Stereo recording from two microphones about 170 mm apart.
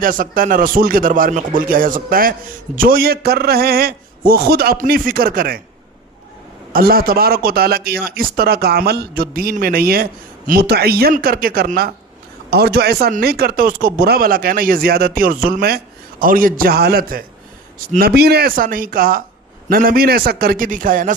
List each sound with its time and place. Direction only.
0.0 s a man's voice: 55° right (ahead or behind)
6.7 s a man's voice: 60° right (ahead or behind)